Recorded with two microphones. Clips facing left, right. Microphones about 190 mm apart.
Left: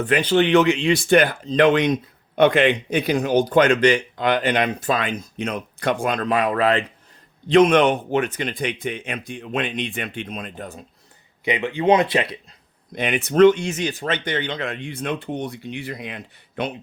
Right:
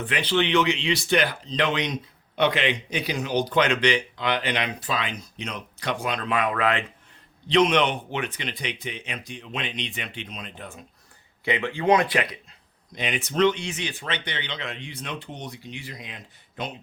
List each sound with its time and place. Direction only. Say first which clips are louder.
0.0 s speech: left 6 dB; 45° left (ahead or behind)
7.4 s speech: left 6 dB; 50° left (ahead or behind)
11.4 s speech: left 3 dB; 15° left (ahead or behind)
12.9 s speech: left 7 dB; 55° left (ahead or behind)